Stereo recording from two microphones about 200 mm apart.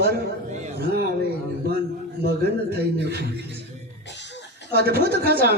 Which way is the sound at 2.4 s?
55° right (ahead or behind).